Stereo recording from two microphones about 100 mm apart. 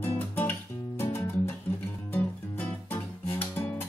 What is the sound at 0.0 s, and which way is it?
Music, 20° left (ahead or behind).